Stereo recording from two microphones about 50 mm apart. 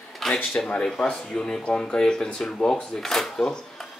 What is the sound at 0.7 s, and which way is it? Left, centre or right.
Speech, left.